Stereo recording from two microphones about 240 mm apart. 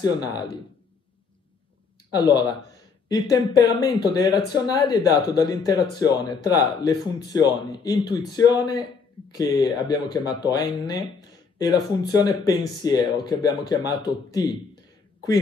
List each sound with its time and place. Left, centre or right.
0.0 s speech: centre
2.1 s speech: centre